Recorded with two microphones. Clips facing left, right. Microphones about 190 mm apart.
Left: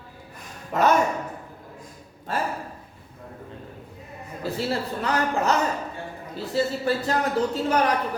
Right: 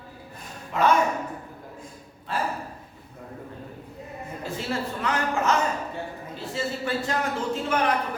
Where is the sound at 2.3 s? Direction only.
45° left (ahead or behind).